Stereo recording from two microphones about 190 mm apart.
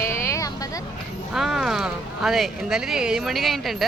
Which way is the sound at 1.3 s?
Centre (ahead or behind).